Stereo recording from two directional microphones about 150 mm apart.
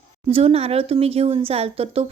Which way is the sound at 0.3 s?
40° right (ahead or behind).